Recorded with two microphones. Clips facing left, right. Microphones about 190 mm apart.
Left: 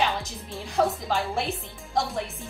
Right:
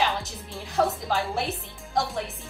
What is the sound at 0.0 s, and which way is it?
A woman's voice, centre (ahead or behind).